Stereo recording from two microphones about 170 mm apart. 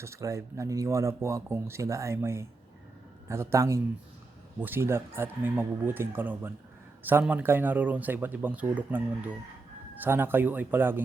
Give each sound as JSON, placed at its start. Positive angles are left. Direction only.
{"t": 0.0, "sound": "speech", "side_deg": -15}